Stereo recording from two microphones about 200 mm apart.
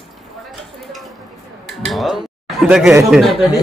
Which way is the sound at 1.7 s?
Centre (ahead or behind).